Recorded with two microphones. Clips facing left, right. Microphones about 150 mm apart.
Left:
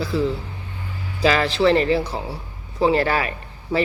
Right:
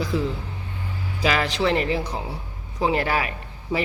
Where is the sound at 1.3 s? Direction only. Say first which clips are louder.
Left 5 dB; 15° right (ahead or behind).